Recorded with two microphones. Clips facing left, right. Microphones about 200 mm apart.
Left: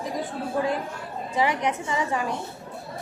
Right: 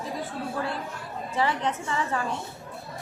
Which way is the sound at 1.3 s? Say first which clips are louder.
Left 2 dB; 15° left (ahead or behind).